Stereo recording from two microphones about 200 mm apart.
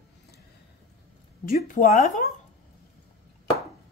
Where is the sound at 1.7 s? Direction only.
45° left (ahead or behind).